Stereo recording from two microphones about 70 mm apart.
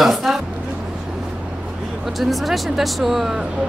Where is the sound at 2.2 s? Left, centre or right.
Centre.